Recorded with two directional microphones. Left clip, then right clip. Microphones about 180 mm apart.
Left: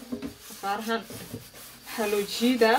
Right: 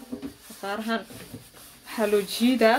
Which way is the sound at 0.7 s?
50° right (ahead or behind).